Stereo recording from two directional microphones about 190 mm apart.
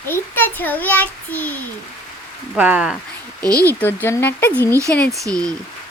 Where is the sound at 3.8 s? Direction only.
10° left (ahead or behind).